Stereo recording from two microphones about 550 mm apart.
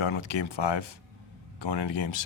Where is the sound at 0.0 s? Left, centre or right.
Left.